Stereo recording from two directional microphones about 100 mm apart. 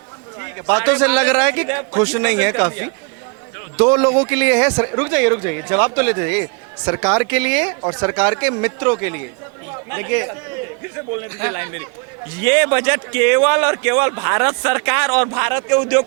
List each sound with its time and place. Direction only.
0.7 s speech: 25° right (ahead or behind)
11.3 s speech: 25° right (ahead or behind)